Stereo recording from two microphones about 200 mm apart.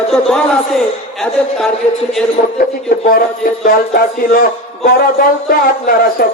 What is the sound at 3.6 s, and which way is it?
Speech, 45° left (ahead or behind).